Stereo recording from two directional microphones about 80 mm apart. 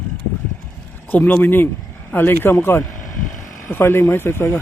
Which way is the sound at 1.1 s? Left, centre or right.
Centre.